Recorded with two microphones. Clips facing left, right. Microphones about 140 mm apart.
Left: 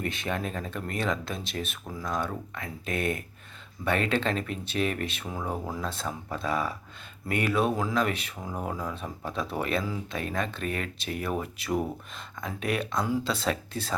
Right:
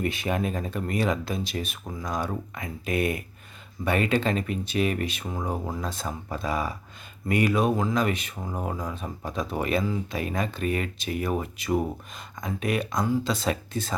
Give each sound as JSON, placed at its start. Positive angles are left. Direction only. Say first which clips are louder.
{"t": 0.0, "sound": "speech", "louder": "right 4 dB", "side_deg": -10}
{"t": 2.0, "sound": "speech", "louder": "right 1 dB", "side_deg": -15}
{"t": 5.4, "sound": "speech", "louder": "right 2 dB", "side_deg": -15}
{"t": 6.4, "sound": "speech", "louder": "even", "side_deg": 0}
{"t": 7.9, "sound": "speech", "louder": "right 2 dB", "side_deg": -10}